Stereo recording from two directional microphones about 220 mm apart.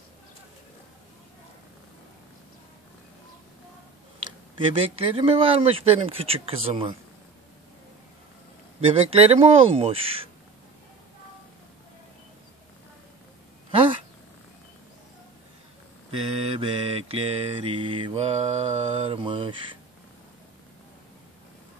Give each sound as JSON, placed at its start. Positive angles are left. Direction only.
{"t": 4.6, "sound": "speech", "side_deg": -25}
{"t": 8.9, "sound": "speech", "side_deg": -25}
{"t": 16.1, "sound": "mantra", "side_deg": -25}